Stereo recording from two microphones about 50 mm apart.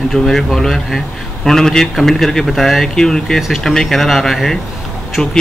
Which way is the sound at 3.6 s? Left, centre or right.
Centre.